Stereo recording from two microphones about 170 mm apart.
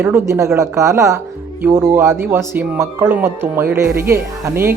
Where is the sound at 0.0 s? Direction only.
15° right (ahead or behind).